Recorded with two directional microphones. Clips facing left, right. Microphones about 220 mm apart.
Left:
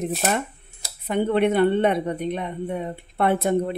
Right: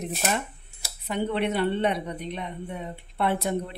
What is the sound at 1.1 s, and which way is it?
A woman's voice, 50° left (ahead or behind).